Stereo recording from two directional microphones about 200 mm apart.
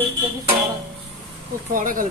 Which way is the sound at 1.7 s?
40° right (ahead or behind).